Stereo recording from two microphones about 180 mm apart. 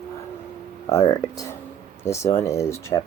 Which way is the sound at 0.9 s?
15° left (ahead or behind).